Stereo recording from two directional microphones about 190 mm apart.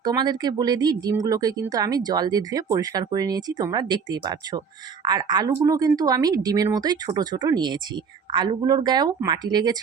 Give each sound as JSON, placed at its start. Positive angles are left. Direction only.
{"t": 0.0, "sound": "speech", "side_deg": -20}